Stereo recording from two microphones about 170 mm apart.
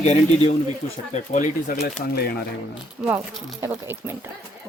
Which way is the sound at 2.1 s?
65° left (ahead or behind).